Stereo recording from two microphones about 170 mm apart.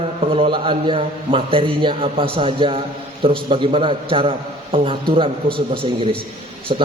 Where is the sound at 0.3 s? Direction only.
30° right (ahead or behind).